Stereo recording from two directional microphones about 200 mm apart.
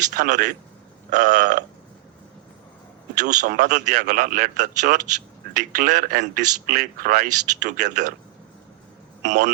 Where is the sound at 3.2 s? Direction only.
40° right (ahead or behind).